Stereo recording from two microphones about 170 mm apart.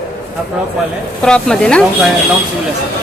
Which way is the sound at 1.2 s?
5° left (ahead or behind).